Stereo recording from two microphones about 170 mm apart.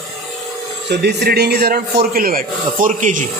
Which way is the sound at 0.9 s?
80° right.